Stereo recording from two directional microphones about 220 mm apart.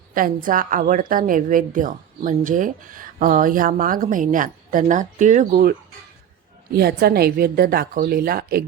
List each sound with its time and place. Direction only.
0.1 s a woman's voice: 40° right (ahead or behind)
6.7 s a woman's voice: 45° right (ahead or behind)